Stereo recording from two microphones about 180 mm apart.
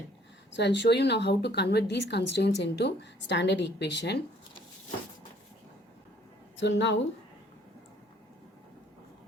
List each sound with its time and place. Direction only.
0.5 s a woman's voice: 75° left (ahead or behind)
6.6 s speech: 75° left (ahead or behind)